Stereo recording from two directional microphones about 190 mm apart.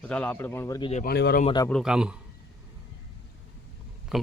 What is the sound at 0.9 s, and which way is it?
Speech, 50° left (ahead or behind).